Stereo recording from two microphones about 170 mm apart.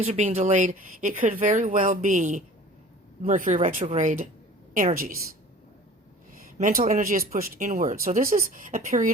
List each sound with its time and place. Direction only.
0.0 s a woman's voice: 40° right (ahead or behind)
6.6 s speech: 50° right (ahead or behind)